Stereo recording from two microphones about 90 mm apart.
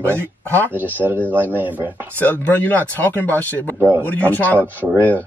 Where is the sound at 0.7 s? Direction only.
20° right (ahead or behind).